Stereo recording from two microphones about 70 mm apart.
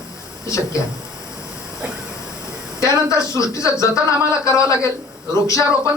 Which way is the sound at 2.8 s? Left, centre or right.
Left.